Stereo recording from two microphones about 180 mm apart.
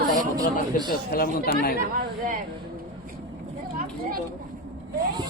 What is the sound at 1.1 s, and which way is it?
Speech, 55° left (ahead or behind).